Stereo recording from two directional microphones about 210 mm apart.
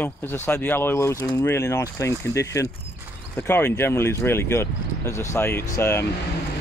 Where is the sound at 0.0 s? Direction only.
10° left (ahead or behind).